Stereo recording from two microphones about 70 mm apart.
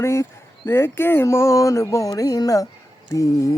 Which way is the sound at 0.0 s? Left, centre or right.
Left.